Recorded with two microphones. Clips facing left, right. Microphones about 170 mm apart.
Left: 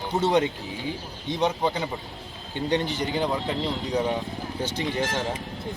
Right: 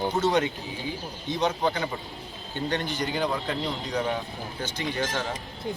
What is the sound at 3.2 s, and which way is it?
Speech, 20° left (ahead or behind).